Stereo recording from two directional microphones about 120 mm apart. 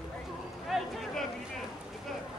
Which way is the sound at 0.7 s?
Centre (ahead or behind).